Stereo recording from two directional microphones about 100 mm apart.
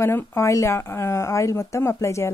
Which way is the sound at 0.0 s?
25° left (ahead or behind).